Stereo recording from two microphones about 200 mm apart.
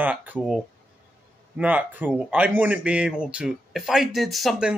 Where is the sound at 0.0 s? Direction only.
10° right (ahead or behind).